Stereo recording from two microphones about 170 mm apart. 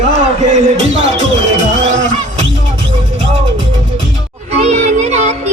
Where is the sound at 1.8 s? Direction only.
90° right.